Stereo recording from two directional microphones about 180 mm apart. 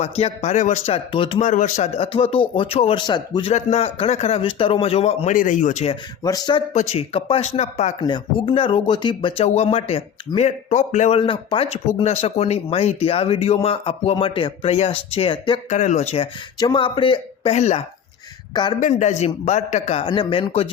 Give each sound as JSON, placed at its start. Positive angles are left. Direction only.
{"t": 0.0, "sound": "speech", "side_deg": 40}
{"t": 1.4, "sound": "speech", "side_deg": 45}
{"t": 6.2, "sound": "speech", "side_deg": 20}
{"t": 6.7, "sound": "speech", "side_deg": 35}
{"t": 8.0, "sound": "speech", "side_deg": 25}
{"t": 11.2, "sound": "speech", "side_deg": 30}
{"t": 15.7, "sound": "speech", "side_deg": 40}
{"t": 18.5, "sound": "speech", "side_deg": 25}
{"t": 18.8, "sound": "speech", "side_deg": 40}